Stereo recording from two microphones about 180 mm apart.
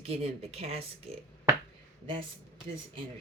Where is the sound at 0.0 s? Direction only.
35° right (ahead or behind).